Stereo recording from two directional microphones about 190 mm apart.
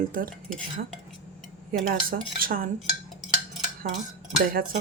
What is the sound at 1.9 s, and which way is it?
Speech, 50° right (ahead or behind).